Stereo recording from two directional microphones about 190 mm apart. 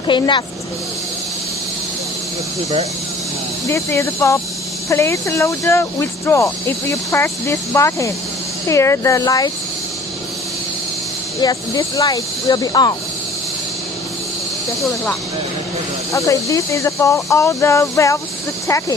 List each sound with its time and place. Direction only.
0.1 s speech: 25° left (ahead or behind)
3.7 s speech: 15° left (ahead or behind)
11.3 s speech: 20° left (ahead or behind)
16.1 s speech: 15° left (ahead or behind)